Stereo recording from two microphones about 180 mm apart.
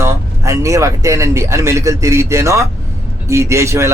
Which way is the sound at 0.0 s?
15° right (ahead or behind).